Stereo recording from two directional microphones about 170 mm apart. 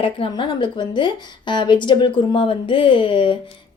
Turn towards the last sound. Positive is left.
turn(degrees=30)  # may be behind; listen again after turning